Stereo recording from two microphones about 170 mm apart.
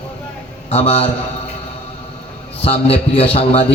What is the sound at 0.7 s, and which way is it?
Music, 35° left (ahead or behind).